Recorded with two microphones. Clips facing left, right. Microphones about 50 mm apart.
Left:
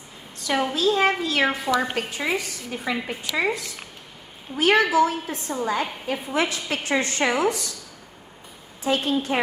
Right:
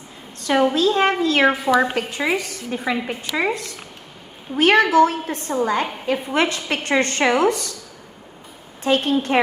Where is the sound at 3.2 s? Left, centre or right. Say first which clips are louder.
Right 2 dB; right.